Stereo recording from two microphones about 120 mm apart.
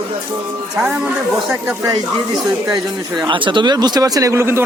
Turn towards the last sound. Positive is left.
turn(degrees=-20)  # may be behind; listen again after turning